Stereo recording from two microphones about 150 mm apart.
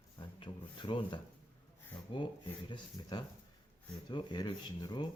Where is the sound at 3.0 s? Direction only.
30° left (ahead or behind).